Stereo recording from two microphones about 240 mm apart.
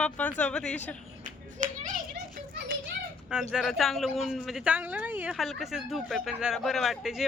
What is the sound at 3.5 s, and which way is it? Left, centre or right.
Speech, centre.